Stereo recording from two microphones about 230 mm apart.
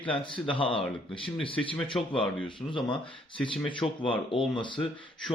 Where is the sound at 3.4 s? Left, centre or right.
Centre.